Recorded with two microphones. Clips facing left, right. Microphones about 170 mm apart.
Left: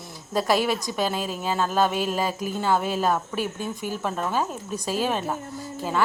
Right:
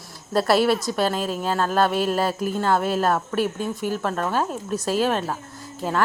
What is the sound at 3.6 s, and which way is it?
Speech, 45° right (ahead or behind).